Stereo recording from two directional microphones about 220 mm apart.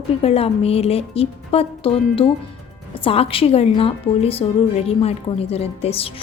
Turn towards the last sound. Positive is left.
turn(degrees=25)  # may be behind; listen again after turning